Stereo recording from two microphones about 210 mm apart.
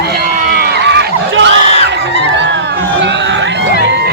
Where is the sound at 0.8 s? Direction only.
55° right (ahead or behind).